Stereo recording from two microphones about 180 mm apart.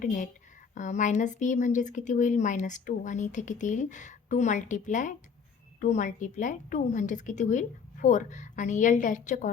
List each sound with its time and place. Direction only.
0.0 s speech: 45° left (ahead or behind)